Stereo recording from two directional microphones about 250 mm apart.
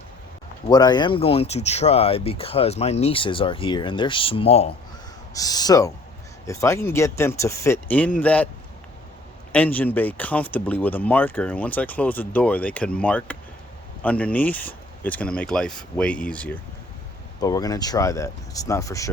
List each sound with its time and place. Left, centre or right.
0.7 s speech: centre
9.5 s speech: centre